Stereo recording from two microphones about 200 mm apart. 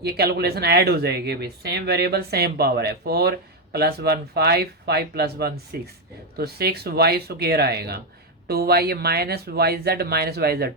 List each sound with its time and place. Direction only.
0.0 s speech: 55° right (ahead or behind)